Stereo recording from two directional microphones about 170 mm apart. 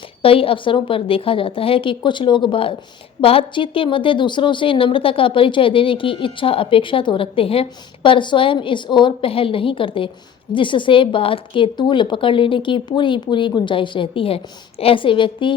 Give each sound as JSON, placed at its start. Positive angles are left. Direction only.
{"t": 0.2, "sound": "a woman's voice", "side_deg": 35}